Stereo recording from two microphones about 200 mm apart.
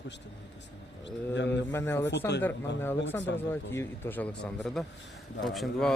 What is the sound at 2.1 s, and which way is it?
Speech, 60° left (ahead or behind).